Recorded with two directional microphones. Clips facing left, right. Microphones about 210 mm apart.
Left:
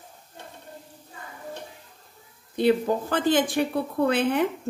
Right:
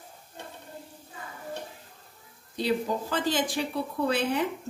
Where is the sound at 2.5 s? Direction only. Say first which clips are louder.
Left 6 dB; 55° left (ahead or behind).